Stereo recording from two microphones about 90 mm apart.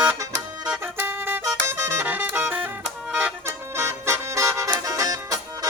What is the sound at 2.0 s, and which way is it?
Music, 20° right (ahead or behind).